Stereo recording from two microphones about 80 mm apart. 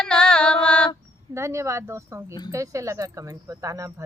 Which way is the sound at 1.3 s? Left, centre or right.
Right.